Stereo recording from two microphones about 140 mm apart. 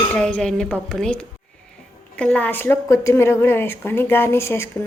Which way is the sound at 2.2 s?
10° left (ahead or behind).